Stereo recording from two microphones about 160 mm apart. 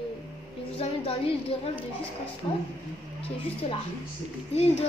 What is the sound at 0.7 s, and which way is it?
Speech, 35° left (ahead or behind).